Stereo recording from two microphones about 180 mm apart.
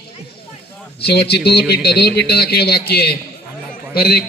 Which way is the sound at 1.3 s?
65° left (ahead or behind).